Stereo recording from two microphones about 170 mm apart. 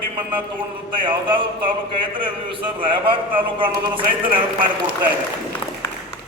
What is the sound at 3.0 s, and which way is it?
A man's voice, 30° right (ahead or behind).